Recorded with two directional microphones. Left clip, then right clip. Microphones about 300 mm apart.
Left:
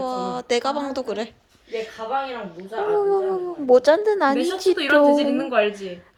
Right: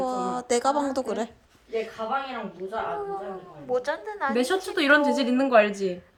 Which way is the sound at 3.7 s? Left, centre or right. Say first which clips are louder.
Left 12 dB; centre.